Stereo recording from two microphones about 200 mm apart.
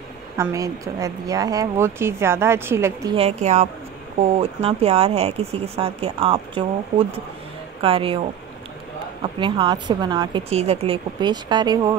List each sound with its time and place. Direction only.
0.4 s a woman's voice: 15° right (ahead or behind)
3.2 s speech: 35° right (ahead or behind)